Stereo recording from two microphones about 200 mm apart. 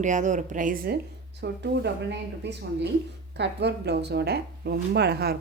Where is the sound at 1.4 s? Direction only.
60° right (ahead or behind).